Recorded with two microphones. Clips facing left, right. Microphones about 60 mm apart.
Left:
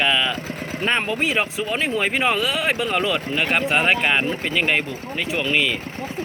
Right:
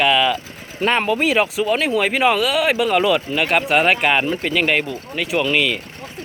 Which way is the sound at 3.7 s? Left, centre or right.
Centre.